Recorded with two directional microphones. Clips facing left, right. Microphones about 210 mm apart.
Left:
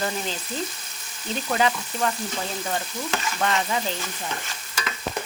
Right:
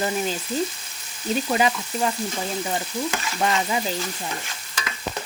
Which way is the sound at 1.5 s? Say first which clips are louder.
Left 1 dB; 15° right (ahead or behind).